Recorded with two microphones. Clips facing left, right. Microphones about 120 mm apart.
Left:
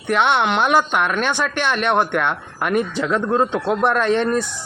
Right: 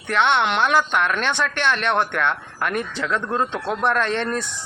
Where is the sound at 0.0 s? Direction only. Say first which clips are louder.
Left 2 dB; 10° left (ahead or behind).